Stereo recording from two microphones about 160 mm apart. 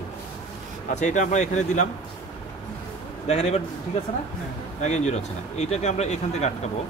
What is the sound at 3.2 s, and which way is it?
Speech, 45° left (ahead or behind).